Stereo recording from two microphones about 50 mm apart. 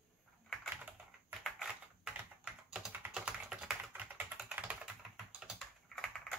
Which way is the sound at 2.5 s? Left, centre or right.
Centre.